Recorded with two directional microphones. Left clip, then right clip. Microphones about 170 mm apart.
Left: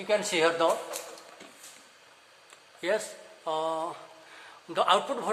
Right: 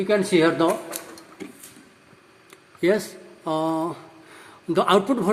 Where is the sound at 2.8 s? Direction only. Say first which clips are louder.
Right 8 dB; 35° right (ahead or behind).